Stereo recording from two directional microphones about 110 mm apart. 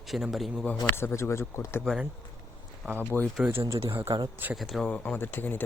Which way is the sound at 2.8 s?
15° right (ahead or behind).